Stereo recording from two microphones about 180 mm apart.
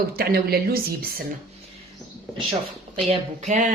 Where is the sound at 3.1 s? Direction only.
40° right (ahead or behind).